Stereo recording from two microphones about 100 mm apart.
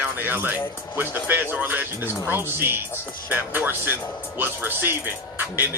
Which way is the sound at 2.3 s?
20° right (ahead or behind).